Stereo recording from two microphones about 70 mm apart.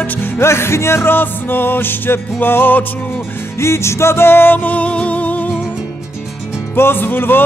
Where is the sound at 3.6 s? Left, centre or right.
Left.